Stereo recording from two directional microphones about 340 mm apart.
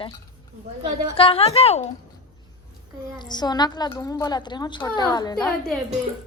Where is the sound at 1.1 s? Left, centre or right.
Centre.